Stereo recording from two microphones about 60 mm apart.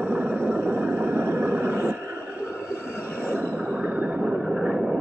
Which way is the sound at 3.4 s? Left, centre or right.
Right.